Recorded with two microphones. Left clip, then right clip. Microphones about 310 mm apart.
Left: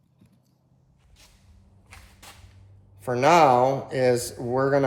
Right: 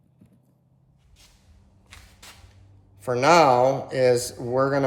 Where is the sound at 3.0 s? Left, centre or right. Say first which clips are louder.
Right 1 dB; centre.